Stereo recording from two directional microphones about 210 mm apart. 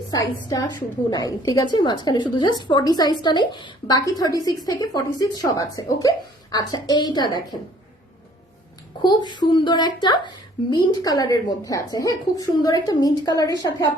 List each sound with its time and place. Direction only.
0.1 s a woman's voice: 20° left (ahead or behind)
9.0 s a woman's voice: 20° left (ahead or behind)